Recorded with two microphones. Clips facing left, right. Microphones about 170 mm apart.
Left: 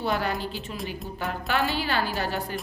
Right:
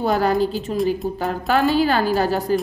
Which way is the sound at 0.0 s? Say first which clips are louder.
Right 9 dB; 40° right (ahead or behind).